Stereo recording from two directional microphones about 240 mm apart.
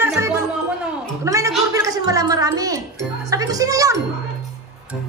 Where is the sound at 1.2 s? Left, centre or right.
Centre.